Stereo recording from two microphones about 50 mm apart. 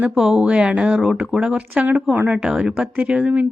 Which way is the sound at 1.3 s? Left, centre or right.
Right.